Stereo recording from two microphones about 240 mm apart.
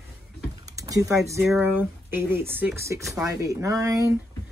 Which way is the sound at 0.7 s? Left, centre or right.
Centre.